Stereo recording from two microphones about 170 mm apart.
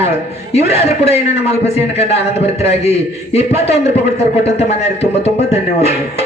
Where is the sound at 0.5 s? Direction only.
40° left (ahead or behind).